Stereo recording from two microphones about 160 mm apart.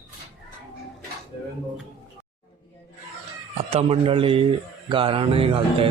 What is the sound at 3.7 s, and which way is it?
Speech, 40° right (ahead or behind).